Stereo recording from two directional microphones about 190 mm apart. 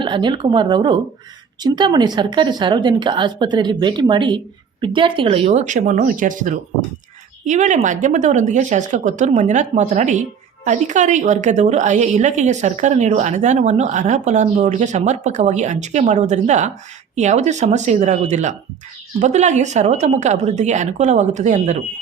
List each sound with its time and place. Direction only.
0.0 s a woman's voice: 25° right (ahead or behind)